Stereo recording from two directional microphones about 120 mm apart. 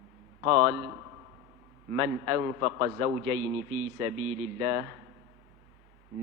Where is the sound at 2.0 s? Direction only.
25° right (ahead or behind).